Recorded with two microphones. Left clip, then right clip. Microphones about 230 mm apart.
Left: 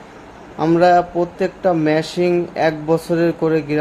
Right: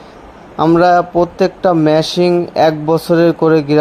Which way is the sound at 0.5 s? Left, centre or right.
Right.